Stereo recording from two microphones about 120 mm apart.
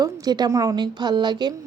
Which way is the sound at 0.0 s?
35° right (ahead or behind).